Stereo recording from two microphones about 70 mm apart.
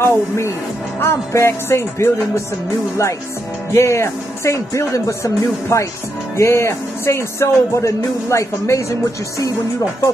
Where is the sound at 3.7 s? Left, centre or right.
Left.